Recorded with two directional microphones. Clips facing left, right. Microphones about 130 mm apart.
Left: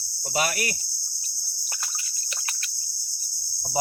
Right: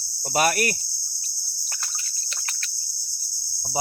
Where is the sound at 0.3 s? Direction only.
50° right (ahead or behind).